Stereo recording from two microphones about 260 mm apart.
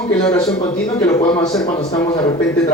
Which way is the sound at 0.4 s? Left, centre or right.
Centre.